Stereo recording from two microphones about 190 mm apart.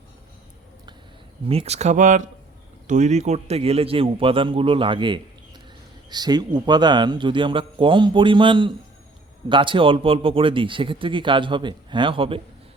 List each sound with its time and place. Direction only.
1.5 s speech: 30° right (ahead or behind)